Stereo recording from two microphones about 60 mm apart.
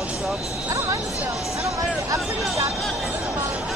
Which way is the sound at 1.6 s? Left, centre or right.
Right.